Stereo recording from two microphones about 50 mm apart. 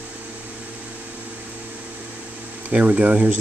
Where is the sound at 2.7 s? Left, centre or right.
Right.